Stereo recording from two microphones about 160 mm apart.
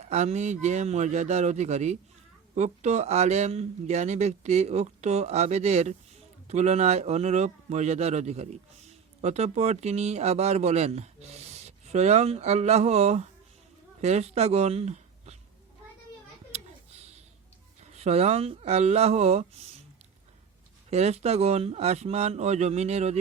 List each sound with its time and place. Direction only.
0.0 s speech: 45° right (ahead or behind)
17.9 s speech: 40° right (ahead or behind)
20.9 s speech: 40° right (ahead or behind)